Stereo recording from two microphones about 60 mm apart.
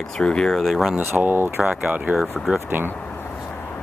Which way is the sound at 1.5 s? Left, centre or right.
Centre.